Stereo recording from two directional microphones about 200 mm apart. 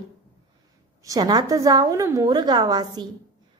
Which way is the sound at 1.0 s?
20° right (ahead or behind).